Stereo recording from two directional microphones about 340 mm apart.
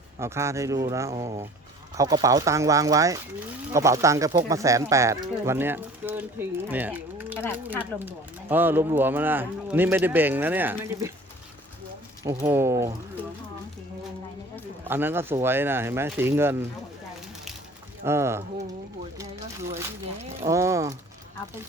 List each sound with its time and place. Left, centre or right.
0.2 s speech: centre
7.3 s speech: centre
7.8 s speech: centre
12.2 s speech: centre
14.8 s speech: centre
18.0 s speech: centre
20.4 s speech: centre